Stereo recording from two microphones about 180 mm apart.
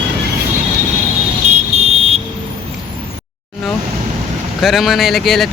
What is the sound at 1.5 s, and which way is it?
Fire alarm, 40° right (ahead or behind).